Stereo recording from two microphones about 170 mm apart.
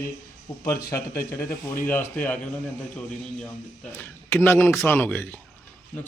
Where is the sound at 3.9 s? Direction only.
10° left (ahead or behind).